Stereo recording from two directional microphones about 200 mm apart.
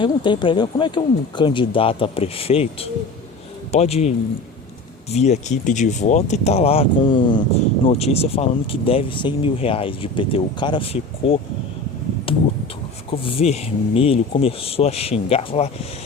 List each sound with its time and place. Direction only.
0.0 s speech: 25° left (ahead or behind)
5.1 s speech: 35° left (ahead or behind)